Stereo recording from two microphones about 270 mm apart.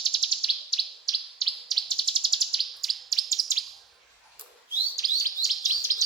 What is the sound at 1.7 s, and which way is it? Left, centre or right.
Bird, centre.